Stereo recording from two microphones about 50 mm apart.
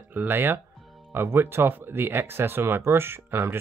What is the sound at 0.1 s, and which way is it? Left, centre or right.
Speech, right.